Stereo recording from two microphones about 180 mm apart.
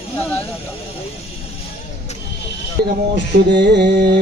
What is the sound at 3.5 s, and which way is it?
Music, 70° right (ahead or behind).